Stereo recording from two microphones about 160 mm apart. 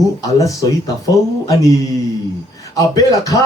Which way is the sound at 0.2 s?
20° left (ahead or behind).